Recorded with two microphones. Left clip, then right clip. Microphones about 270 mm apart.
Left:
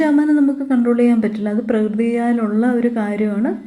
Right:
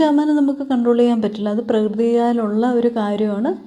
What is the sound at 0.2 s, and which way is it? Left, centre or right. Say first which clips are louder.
Speech: left 2 dB; centre.